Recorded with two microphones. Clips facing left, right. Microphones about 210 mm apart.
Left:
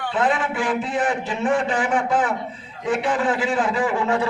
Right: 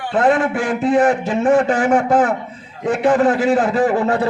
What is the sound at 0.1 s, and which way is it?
A man's voice, 45° right (ahead or behind).